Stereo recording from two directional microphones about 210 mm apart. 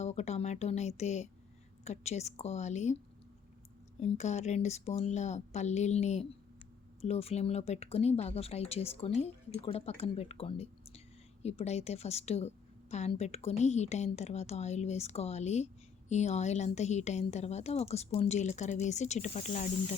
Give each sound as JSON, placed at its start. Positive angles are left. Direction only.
{"t": 0.0, "sound": "a woman's voice", "side_deg": 30}
{"t": 4.0, "sound": "a woman's voice", "side_deg": 35}